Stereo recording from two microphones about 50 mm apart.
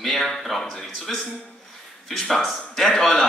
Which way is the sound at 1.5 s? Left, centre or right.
Centre.